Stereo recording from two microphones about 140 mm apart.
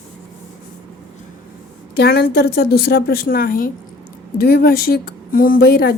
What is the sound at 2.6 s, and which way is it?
Speech, 90° left.